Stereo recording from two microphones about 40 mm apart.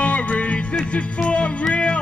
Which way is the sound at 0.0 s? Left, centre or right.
Left.